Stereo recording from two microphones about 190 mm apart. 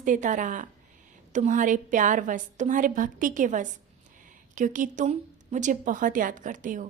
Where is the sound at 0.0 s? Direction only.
40° right (ahead or behind).